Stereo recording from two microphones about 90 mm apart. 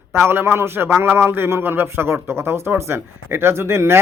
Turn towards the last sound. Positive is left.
turn(degrees=-30)  # may be behind; listen again after turning